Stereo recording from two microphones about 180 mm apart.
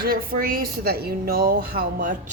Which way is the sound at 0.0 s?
55° right (ahead or behind).